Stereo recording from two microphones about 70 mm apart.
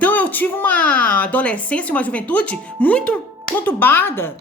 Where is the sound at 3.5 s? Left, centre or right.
Left.